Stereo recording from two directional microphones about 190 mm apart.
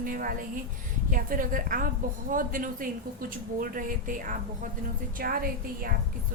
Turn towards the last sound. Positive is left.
turn(degrees=-50)  # may be behind; listen again after turning